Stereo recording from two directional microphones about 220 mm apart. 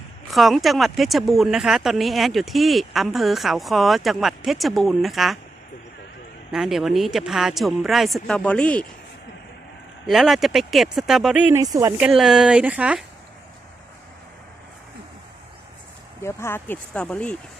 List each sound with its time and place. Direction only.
0.3 s speech: centre (ahead or behind)
6.5 s speech: centre (ahead or behind)
10.1 s speech: centre (ahead or behind)
16.2 s speech: 10° left (ahead or behind)